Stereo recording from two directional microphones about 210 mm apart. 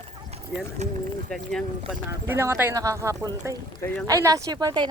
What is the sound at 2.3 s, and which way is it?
Speech, 10° right (ahead or behind).